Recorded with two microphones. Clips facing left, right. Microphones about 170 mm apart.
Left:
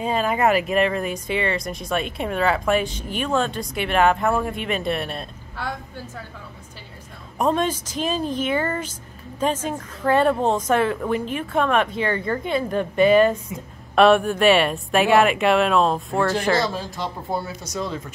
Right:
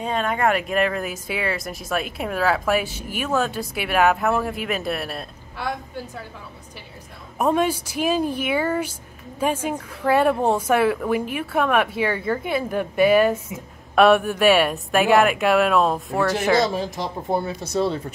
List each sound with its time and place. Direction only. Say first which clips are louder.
0.0 s speech: left 2 dB; 5° left (ahead or behind)
7.3 s a woman's voice: right 1 dB; 10° right (ahead or behind); by 18.0 s 30° right (ahead or behind)